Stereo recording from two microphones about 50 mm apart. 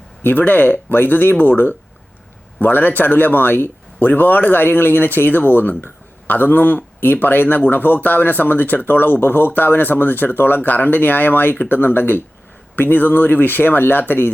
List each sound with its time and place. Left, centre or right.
0.2 s speech: left